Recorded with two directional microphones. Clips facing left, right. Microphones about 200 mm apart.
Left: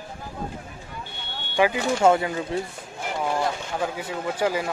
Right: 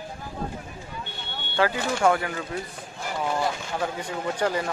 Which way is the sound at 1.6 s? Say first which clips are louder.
Left 3 dB; 15° left (ahead or behind).